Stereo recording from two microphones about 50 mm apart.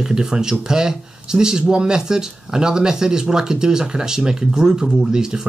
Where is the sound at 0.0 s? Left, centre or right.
Centre.